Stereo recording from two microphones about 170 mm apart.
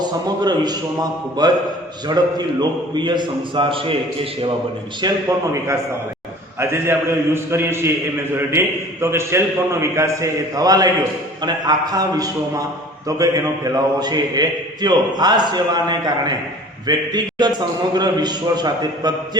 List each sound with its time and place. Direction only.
0.0 s a man's voice: 25° right (ahead or behind)
6.6 s a man's voice: 15° right (ahead or behind)